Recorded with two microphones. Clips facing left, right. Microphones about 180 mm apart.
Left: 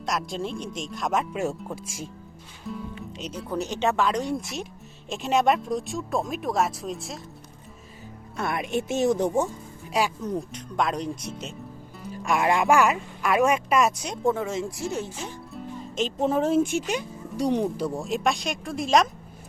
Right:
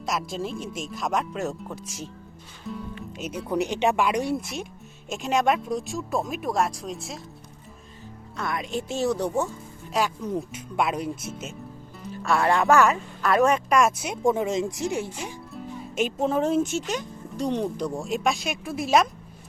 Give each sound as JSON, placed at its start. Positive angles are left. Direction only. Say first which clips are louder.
{"t": 0.0, "sound": "speech", "louder": "even", "side_deg": 0}
{"t": 2.7, "sound": "speech", "louder": "even", "side_deg": 0}
{"t": 8.4, "sound": "speech", "louder": "left 2 dB", "side_deg": 25}
{"t": 10.2, "sound": "speech", "louder": "even", "side_deg": -5}
{"t": 12.2, "sound": "speech", "louder": "right 1 dB", "side_deg": 15}
{"t": 15.5, "sound": "music", "louder": "right 1 dB", "side_deg": -10}
{"t": 16.1, "sound": "speech", "louder": "left 2 dB", "side_deg": 0}
{"t": 16.6, "sound": "speech", "louder": "left 1 dB", "side_deg": 10}